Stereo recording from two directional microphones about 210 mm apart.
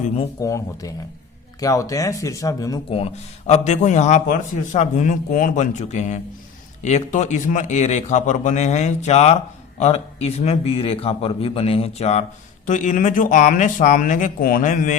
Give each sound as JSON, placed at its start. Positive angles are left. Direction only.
{"t": 0.3, "sound": "a man's voice", "side_deg": 15}